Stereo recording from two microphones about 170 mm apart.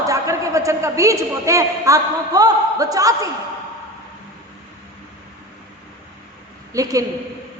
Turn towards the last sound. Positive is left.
turn(degrees=-20)  # may be behind; listen again after turning